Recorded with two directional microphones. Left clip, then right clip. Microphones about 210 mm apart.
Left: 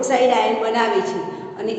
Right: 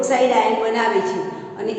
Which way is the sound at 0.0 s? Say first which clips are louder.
Even; 15° left (ahead or behind).